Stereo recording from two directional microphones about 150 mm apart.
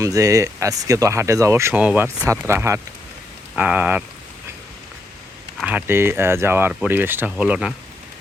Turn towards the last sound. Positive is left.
turn(degrees=-5)  # may be behind; listen again after turning